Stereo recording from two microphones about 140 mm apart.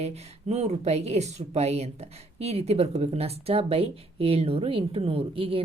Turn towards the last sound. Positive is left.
turn(degrees=-40)  # may be behind; listen again after turning